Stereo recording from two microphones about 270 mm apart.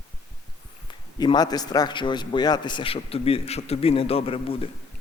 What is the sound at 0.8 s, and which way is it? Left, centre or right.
A man's voice, centre.